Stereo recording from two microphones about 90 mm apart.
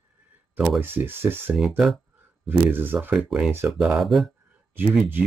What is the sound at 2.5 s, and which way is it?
Speech, 20° right (ahead or behind).